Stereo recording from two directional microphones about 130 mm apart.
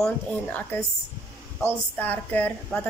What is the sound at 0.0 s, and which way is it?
Speech, 10° left (ahead or behind).